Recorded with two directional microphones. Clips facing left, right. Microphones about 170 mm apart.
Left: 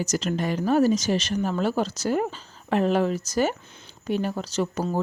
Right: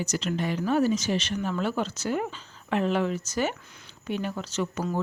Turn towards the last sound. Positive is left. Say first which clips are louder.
# left 3 dB
turn(degrees=35)  # may be behind; listen again after turning